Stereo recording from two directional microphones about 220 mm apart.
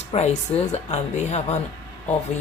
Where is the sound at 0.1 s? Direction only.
30° left (ahead or behind).